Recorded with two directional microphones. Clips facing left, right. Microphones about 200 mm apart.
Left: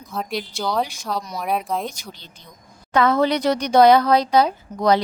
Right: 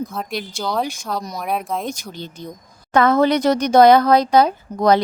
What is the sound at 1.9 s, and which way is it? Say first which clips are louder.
Speech: right 11 dB; 50° right (ahead or behind).